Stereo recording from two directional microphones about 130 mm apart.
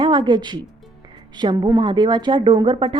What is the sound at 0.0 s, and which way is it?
A woman's voice, 35° right (ahead or behind).